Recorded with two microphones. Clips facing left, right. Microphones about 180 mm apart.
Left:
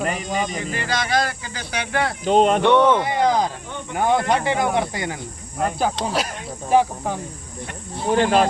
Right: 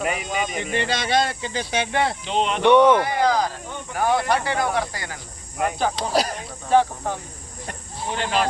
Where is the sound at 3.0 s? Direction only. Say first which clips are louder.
Left 1 dB; 20° left (ahead or behind).